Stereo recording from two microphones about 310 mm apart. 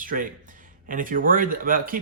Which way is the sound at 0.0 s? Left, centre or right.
Right.